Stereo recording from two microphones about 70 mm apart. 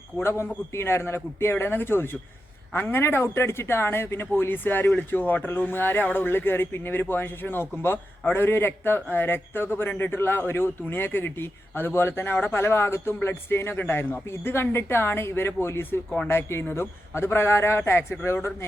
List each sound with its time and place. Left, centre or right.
0.2 s a man's voice: left